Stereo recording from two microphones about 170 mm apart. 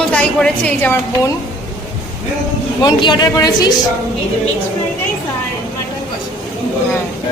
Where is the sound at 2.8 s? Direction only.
25° left (ahead or behind).